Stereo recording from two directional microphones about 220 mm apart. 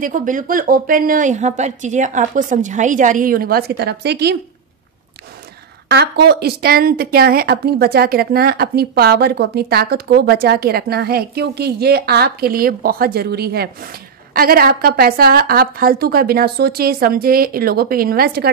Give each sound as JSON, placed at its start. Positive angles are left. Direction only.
{"t": 0.0, "sound": "a woman's voice", "side_deg": -35}
{"t": 5.9, "sound": "a woman's voice", "side_deg": -50}